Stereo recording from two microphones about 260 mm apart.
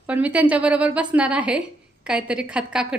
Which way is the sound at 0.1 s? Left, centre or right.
Centre.